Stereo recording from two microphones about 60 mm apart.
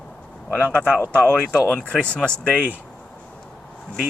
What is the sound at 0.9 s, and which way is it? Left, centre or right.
Speech, left.